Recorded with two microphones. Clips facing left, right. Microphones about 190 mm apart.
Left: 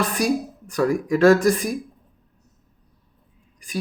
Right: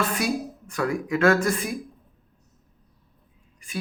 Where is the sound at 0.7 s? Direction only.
35° left (ahead or behind).